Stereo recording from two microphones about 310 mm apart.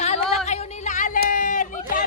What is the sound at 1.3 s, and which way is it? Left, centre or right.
Run, left.